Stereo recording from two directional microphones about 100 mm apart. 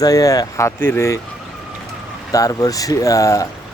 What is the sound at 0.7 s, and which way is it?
Speech, 25° left (ahead or behind).